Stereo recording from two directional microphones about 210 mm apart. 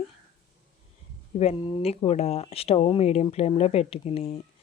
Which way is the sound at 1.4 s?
25° left (ahead or behind).